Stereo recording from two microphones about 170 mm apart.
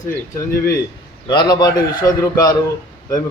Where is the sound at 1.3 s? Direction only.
25° left (ahead or behind).